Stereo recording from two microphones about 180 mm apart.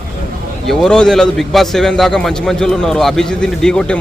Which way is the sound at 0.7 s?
5° left (ahead or behind).